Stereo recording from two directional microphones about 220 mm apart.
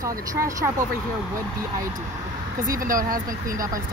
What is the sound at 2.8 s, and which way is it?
Speech, 40° right (ahead or behind).